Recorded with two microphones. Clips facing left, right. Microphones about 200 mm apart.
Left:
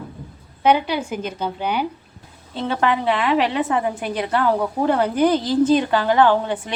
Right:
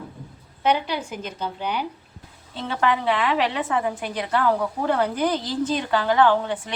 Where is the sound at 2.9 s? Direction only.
25° left (ahead or behind).